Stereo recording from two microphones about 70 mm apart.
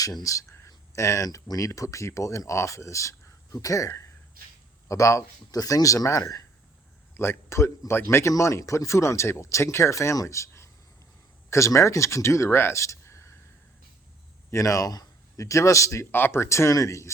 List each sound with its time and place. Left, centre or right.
0.0 s speech: left
5.5 s speech: left
7.1 s speech: left
14.5 s speech: left
16.1 s speech: left